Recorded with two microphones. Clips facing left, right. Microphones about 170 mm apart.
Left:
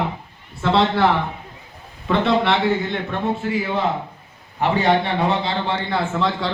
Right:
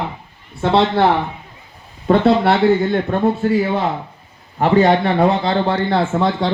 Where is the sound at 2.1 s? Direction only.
40° right (ahead or behind).